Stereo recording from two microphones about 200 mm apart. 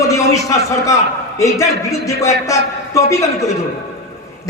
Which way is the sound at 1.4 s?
15° left (ahead or behind).